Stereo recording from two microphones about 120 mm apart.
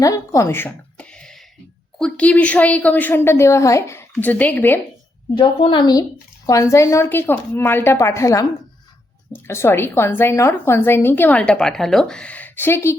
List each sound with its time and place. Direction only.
0.0 s a woman's voice: 30° left (ahead or behind)
5.4 s a woman's voice: 50° left (ahead or behind)
5.8 s speech: 30° left (ahead or behind)